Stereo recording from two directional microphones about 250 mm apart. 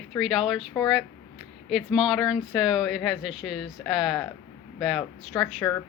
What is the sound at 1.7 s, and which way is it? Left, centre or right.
A woman's voice, centre.